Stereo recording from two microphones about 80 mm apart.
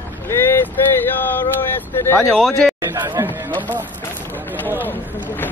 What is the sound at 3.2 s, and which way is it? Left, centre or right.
Speech, right.